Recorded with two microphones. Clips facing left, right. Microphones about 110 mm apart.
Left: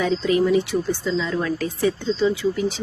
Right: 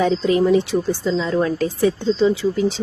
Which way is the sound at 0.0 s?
30° right (ahead or behind).